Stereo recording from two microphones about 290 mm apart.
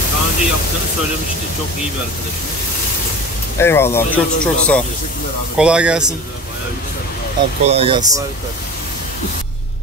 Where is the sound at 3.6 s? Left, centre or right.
Centre.